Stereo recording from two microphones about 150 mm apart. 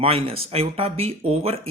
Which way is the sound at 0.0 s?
40° right (ahead or behind).